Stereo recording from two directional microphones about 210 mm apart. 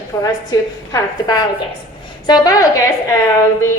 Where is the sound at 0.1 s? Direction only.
15° left (ahead or behind).